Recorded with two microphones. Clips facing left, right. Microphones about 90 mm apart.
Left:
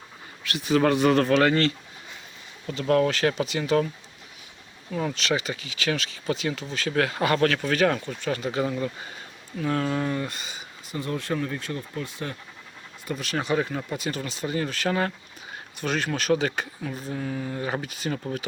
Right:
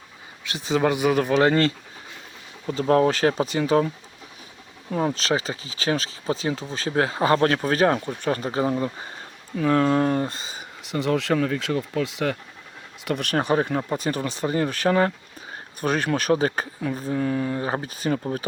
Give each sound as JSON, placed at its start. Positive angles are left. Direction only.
{"t": 0.4, "sound": "speech", "side_deg": -25}
{"t": 1.4, "sound": "speech", "side_deg": -30}
{"t": 9.6, "sound": "speech", "side_deg": -50}
{"t": 10.2, "sound": "speech", "side_deg": -30}
{"t": 10.8, "sound": "speech", "side_deg": -80}
{"t": 13.1, "sound": "speech", "side_deg": -60}
{"t": 17.6, "sound": "speech", "side_deg": -35}